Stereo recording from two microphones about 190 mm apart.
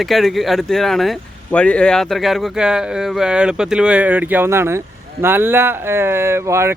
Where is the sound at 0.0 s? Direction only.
Centre (ahead or behind).